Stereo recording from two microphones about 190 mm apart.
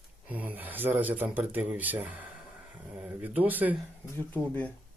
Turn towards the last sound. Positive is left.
turn(degrees=10)  # may be behind; listen again after turning